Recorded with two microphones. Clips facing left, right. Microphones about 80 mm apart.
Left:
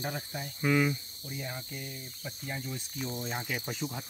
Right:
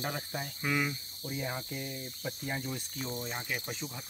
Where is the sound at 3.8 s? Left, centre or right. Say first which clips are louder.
Left 5 dB; left.